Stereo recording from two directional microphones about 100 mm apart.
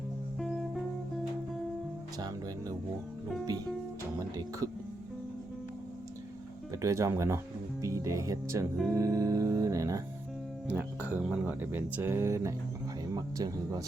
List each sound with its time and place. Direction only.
0.3 s music: centre (ahead or behind)
2.1 s speech: 40° right (ahead or behind)
6.8 s speech: 30° right (ahead or behind)
10.7 s speech: 20° right (ahead or behind); by 13.8 s 35° right (ahead or behind)